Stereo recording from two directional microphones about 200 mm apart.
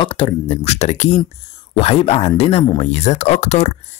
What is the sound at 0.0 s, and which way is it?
Speech, 25° left (ahead or behind).